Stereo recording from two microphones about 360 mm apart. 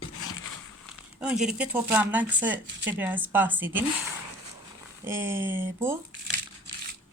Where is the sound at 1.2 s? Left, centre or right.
Centre.